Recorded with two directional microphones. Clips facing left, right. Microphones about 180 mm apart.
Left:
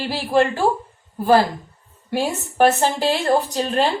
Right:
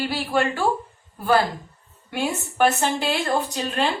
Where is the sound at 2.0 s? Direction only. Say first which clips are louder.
Left 3 dB; 35° left (ahead or behind).